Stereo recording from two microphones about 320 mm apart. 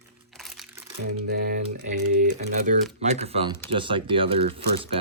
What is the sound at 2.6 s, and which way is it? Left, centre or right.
Speech, right.